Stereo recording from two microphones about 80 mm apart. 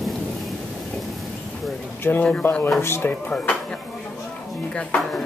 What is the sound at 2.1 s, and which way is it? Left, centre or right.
Speech, centre.